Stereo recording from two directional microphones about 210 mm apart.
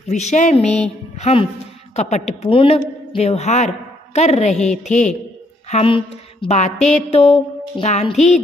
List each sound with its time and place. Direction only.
0.1 s a woman's voice: 35° left (ahead or behind)